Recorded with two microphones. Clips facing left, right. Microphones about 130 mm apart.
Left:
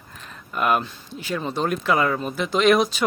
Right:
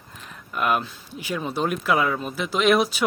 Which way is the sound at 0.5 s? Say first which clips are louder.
Left 2 dB; centre (ahead or behind).